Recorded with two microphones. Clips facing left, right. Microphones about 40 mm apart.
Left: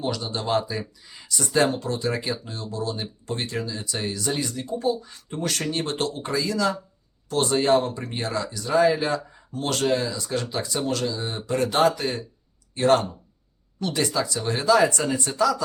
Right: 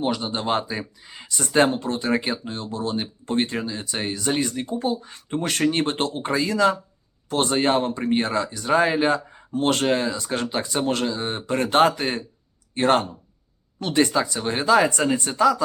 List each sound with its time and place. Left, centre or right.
0.0 s speech: right